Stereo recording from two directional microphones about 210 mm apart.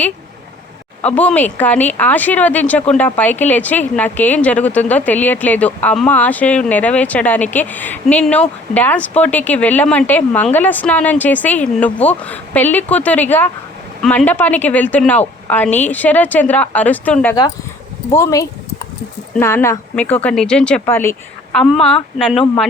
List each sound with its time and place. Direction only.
1.0 s speech: 5° left (ahead or behind)